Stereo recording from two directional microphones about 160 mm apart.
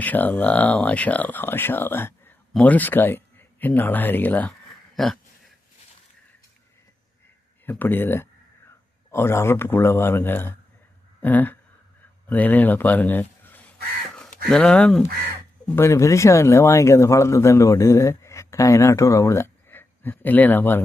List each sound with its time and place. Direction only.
0.0 s speech: 10° left (ahead or behind)
7.6 s speech: 10° left (ahead or behind)
15.7 s speech: 15° left (ahead or behind)